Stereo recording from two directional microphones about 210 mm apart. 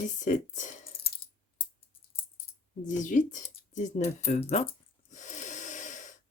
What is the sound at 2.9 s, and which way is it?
Speech, 35° left (ahead or behind).